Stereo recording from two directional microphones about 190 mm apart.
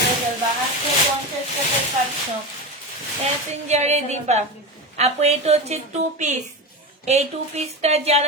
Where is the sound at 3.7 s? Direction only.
35° right (ahead or behind).